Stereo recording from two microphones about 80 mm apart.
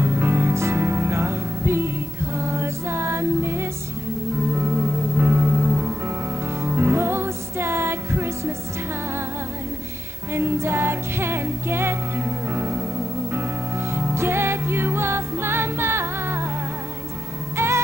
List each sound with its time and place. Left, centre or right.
0.0 s music: right
10.3 s music: right
17.6 s music: right